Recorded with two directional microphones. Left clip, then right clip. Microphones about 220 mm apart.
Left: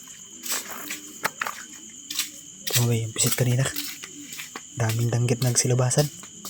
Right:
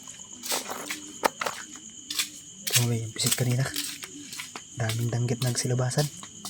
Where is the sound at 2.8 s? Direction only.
15° left (ahead or behind).